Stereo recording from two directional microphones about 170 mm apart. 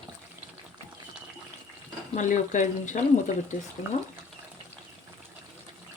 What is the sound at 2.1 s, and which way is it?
Speech, 45° left (ahead or behind).